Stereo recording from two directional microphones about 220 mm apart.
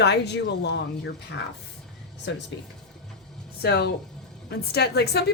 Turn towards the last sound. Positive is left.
turn(degrees=50)  # may be behind; listen again after turning